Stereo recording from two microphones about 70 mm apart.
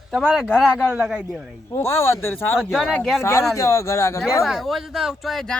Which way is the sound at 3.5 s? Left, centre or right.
Left.